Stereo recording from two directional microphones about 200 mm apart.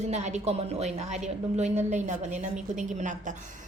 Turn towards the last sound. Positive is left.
turn(degrees=-40)  # may be behind; listen again after turning